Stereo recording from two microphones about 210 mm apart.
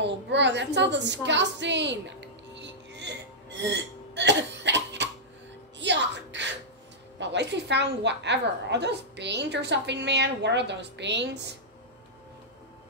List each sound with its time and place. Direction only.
0.0 s a sound: 55° right (ahead or behind)
5.8 s music: 60° right (ahead or behind)
7.2 s a woman's voice: 55° right (ahead or behind)